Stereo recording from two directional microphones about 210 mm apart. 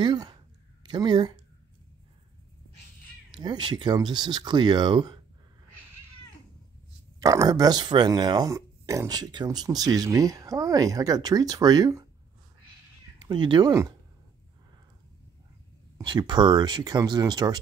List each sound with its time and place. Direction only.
0.0 s speech: 20° right (ahead or behind)
3.3 s speech: 20° right (ahead or behind)
7.2 s speech: 15° right (ahead or behind)
13.2 s speech: 20° right (ahead or behind)
16.0 s speech: 20° right (ahead or behind)